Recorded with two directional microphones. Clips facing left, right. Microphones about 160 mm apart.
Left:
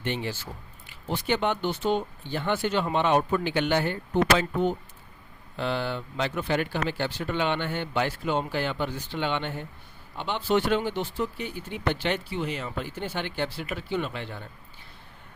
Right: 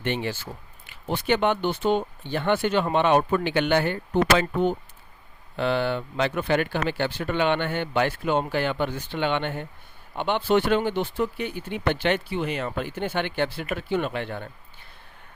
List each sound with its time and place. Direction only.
0.0 s speech: 65° right (ahead or behind)
5.5 s speech: 65° right (ahead or behind)